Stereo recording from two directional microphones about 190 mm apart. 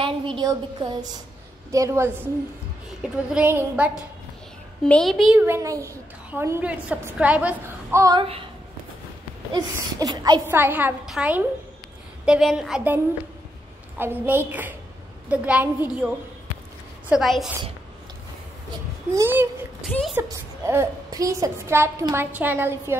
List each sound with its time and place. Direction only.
0.4 s a woman's voice: 20° right (ahead or behind); by 4.0 s 5° right (ahead or behind)
4.8 s a woman's voice: 5° left (ahead or behind); by 8.2 s 15° right (ahead or behind)
8.2 s a woman's voice: 30° right (ahead or behind)
9.5 s a woman's voice: 20° right (ahead or behind)
17.1 s a woman's voice: centre (ahead or behind)
19.1 s a woman's voice: 10° right (ahead or behind)
19.8 s a woman's voice: centre (ahead or behind)
20.2 s a woman's voice: 15° right (ahead or behind)